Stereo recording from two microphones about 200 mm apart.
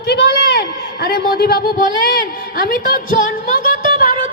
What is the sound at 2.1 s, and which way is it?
A woman's voice, 45° left (ahead or behind).